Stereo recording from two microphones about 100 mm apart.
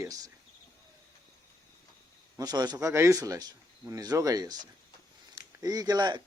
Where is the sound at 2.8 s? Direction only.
30° right (ahead or behind).